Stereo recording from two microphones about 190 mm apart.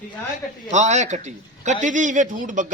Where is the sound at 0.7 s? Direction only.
40° right (ahead or behind).